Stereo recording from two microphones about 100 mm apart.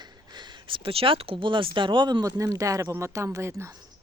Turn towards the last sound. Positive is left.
turn(degrees=-25)  # may be behind; listen again after turning